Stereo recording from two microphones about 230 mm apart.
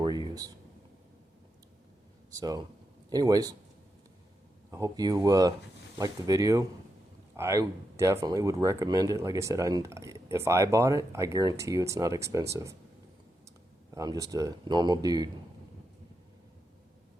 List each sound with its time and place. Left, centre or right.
0.0 s a sound: centre
2.3 s speech: centre
4.7 s speech: centre
13.9 s speech: centre